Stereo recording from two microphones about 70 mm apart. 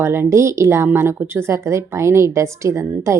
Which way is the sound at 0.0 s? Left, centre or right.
Right.